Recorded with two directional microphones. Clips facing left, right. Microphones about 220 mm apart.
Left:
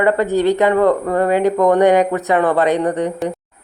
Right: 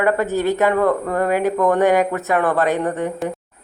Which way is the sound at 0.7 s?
15° left (ahead or behind).